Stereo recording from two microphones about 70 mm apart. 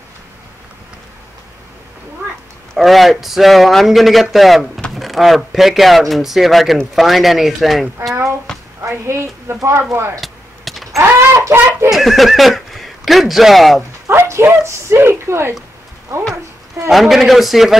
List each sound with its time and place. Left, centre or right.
2.8 s speech: centre
8.1 s a sound: right
8.8 s speech: right
10.2 s vehicle: centre
11.5 s speech: right
11.9 s speech: centre
14.0 s speech: right
16.9 s speech: centre